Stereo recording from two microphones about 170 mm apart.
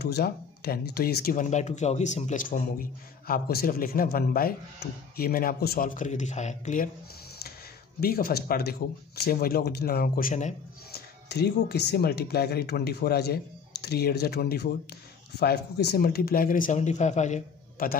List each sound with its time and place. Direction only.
0.0 s speech: 70° left (ahead or behind); by 6.9 s 45° left (ahead or behind)
8.0 s speech: 60° left (ahead or behind)
10.9 s speech: 70° left (ahead or behind); by 17.8 s 45° left (ahead or behind)